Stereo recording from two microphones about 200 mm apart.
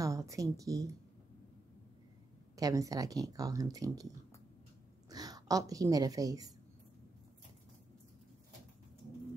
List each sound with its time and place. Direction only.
0.0 s speech: 15° right (ahead or behind)
2.5 s speech: 15° right (ahead or behind)
5.1 s a woman's voice: 20° right (ahead or behind)